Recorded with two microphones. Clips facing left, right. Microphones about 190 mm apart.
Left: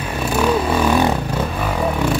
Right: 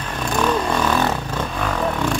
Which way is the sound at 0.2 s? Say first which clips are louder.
Left 2 dB; 10° left (ahead or behind).